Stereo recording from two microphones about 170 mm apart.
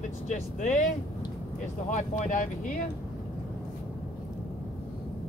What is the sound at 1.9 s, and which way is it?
Speech, 50° left (ahead or behind).